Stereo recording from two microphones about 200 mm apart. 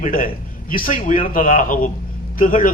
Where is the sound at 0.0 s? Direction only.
45° left (ahead or behind).